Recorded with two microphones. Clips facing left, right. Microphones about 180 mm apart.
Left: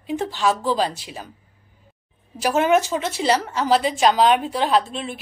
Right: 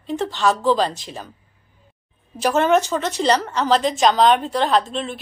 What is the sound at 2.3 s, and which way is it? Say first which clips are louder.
Speech: right 1 dB; 10° left (ahead or behind).